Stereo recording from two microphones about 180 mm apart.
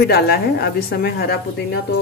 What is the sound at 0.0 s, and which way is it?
A woman's voice, 60° left (ahead or behind).